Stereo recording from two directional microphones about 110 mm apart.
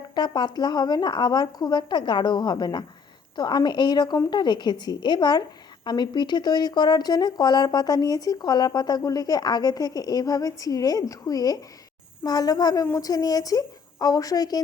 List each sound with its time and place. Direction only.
0.1 s a woman's voice: 40° left (ahead or behind)